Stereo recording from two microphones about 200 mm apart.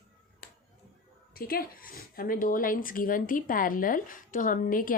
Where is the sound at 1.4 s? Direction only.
50° left (ahead or behind).